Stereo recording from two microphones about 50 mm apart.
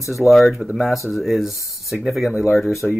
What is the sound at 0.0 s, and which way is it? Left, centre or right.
Speech, centre.